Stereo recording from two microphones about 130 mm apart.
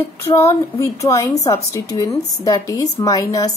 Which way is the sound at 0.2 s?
20° left (ahead or behind).